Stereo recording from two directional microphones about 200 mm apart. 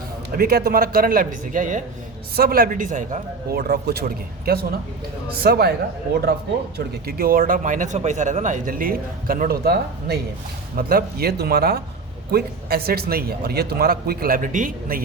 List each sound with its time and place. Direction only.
0.3 s a man's voice: 50° right (ahead or behind)
6.7 s a man's voice: 50° right (ahead or behind)